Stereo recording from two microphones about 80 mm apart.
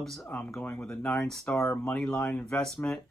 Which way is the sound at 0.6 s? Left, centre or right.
Centre.